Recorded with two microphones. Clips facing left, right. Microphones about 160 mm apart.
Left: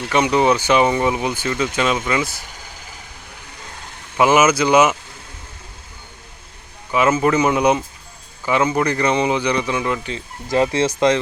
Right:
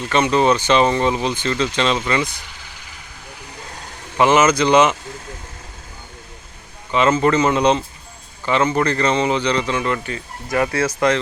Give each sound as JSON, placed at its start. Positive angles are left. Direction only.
{"t": 0.1, "sound": "speech", "side_deg": 15}
{"t": 4.2, "sound": "speech", "side_deg": 10}
{"t": 6.9, "sound": "speech", "side_deg": 10}